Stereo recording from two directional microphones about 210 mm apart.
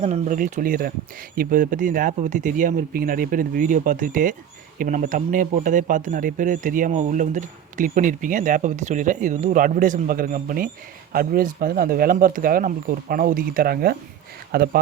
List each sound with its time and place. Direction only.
0.0 s speech: 35° right (ahead or behind)